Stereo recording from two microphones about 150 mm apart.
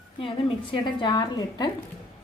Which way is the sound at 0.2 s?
35° left (ahead or behind).